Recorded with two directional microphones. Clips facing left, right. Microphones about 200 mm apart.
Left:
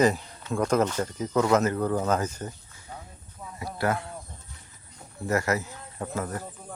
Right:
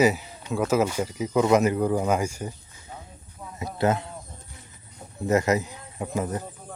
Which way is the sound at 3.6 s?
20° right (ahead or behind).